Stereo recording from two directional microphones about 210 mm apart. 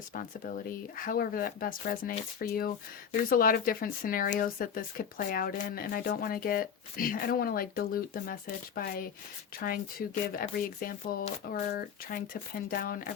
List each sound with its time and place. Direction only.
0.1 s speech: 40° left (ahead or behind)